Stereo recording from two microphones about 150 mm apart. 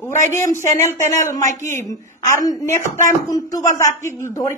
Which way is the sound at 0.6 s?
20° left (ahead or behind).